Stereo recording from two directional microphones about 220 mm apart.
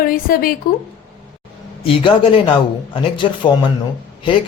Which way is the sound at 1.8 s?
25° left (ahead or behind).